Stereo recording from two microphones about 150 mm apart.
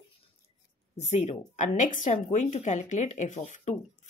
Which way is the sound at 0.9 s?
50° left (ahead or behind).